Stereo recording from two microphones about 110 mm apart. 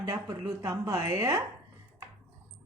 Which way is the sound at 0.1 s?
30° right (ahead or behind).